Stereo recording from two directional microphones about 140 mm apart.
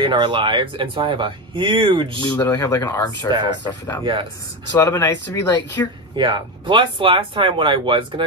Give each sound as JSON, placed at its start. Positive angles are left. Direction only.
{"t": 0.0, "sound": "speech", "side_deg": -35}
{"t": 2.2, "sound": "speech", "side_deg": 15}
{"t": 3.3, "sound": "speech", "side_deg": -30}
{"t": 4.7, "sound": "speech", "side_deg": 20}
{"t": 6.1, "sound": "speech", "side_deg": -35}